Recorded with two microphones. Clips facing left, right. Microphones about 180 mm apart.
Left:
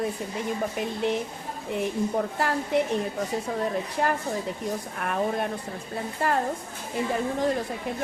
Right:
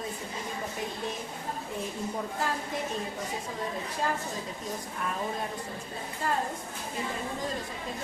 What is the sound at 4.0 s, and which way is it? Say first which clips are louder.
A woman's voice: left 5 dB; 65° left (ahead or behind).